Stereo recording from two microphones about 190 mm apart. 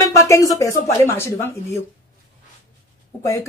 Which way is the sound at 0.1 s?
15° left (ahead or behind).